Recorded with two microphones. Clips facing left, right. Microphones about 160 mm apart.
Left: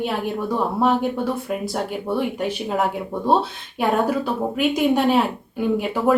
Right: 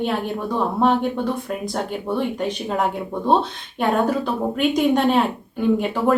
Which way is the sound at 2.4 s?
5° left (ahead or behind).